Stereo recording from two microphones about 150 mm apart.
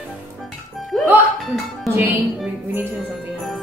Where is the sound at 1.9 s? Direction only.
10° right (ahead or behind).